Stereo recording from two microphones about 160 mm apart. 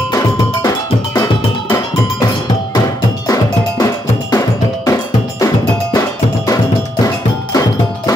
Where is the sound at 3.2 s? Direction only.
20° left (ahead or behind).